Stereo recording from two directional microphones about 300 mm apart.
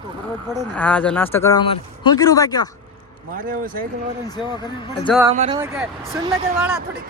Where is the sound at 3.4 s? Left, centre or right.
Right.